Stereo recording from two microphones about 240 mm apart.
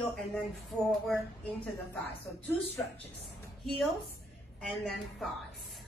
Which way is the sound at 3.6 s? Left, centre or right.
Centre.